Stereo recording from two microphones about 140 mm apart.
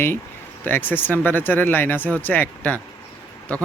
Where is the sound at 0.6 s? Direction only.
15° left (ahead or behind).